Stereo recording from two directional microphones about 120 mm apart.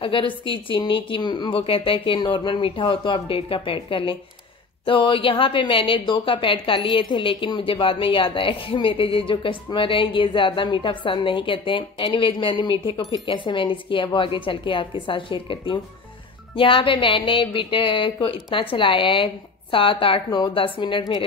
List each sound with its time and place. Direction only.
0.0 s a woman's voice: 45° left (ahead or behind)